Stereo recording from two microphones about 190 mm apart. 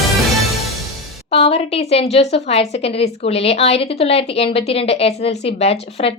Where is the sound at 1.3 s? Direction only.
30° left (ahead or behind).